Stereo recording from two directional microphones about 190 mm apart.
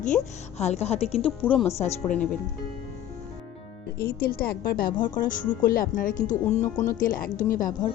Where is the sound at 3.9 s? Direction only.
50° left (ahead or behind).